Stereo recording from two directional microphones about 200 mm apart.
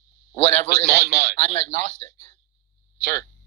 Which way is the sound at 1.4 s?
30° left (ahead or behind).